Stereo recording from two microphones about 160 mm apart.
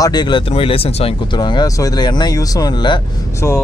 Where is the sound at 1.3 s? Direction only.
25° left (ahead or behind).